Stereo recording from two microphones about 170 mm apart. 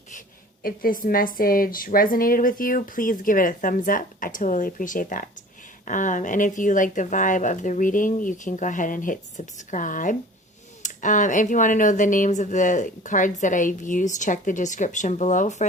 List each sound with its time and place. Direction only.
0.6 s a woman's voice: 55° left (ahead or behind)